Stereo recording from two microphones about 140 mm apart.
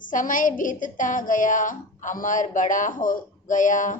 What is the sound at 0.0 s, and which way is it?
A woman's voice, 70° left (ahead or behind).